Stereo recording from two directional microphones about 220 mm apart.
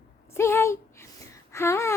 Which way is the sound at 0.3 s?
10° left (ahead or behind).